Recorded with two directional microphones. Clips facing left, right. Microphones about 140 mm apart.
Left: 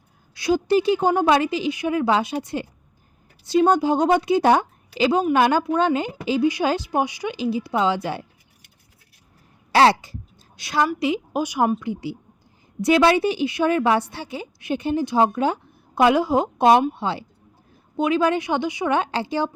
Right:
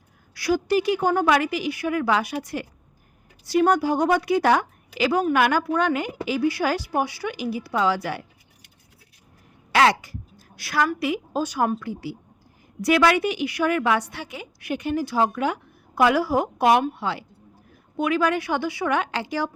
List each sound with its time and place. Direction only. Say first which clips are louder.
0.3 s a woman's voice: left 2 dB; 20° left (ahead or behind)
9.7 s a woman's voice: left 3 dB; 30° left (ahead or behind)